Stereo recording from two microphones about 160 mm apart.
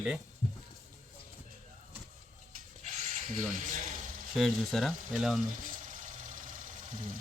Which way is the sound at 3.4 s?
55° right (ahead or behind).